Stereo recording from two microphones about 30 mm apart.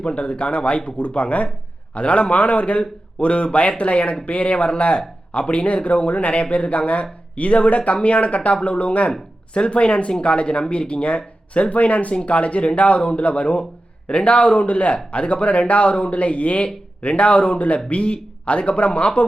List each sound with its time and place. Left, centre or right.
0.0 s speech: left
11.7 s speech: left